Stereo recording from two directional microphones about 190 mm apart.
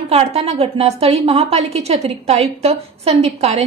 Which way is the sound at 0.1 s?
35° right (ahead or behind).